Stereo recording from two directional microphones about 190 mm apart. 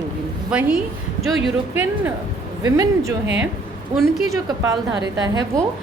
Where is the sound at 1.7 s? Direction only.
10° right (ahead or behind).